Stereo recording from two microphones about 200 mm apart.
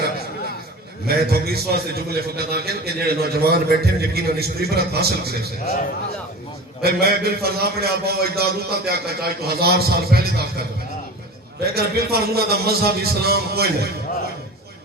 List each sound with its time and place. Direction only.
1.0 s a man's voice: 50° right (ahead or behind)
6.8 s a man's voice: 50° right (ahead or behind)
11.6 s a man's voice: 50° right (ahead or behind)